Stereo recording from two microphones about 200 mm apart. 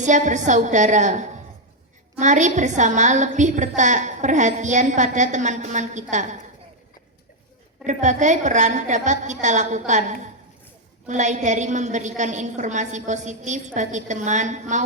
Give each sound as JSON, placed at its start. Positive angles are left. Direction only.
{"t": 0.0, "sound": "a woman's voice", "side_deg": -35}
{"t": 7.9, "sound": "a woman's voice", "side_deg": -35}